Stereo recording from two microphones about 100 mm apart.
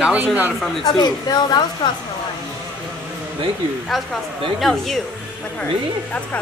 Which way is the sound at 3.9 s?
Centre (ahead or behind).